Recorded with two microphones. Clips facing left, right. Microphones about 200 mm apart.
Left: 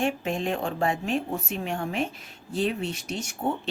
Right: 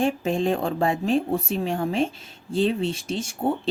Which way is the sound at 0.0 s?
35° right (ahead or behind).